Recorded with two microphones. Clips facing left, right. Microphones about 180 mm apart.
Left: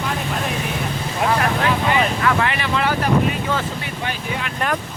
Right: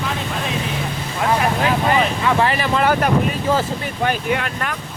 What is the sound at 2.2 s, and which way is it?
Speech, 30° right (ahead or behind).